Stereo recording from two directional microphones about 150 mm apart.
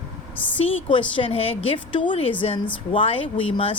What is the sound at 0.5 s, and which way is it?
Speech, 35° left (ahead or behind).